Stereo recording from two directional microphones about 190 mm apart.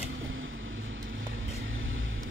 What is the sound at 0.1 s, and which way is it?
Vehicle, 90° right.